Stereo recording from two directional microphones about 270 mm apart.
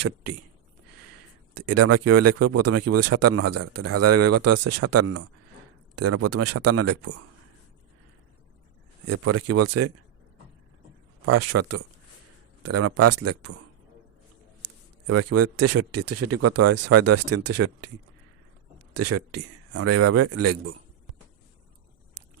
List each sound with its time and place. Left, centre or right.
1.5 s speech: right
9.0 s speech: right
11.3 s speech: right
15.0 s speech: right
18.9 s speech: right